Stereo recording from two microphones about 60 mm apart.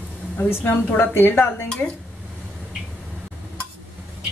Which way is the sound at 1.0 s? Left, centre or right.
Left.